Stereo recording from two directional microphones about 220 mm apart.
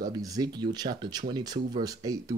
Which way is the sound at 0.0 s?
15° right (ahead or behind).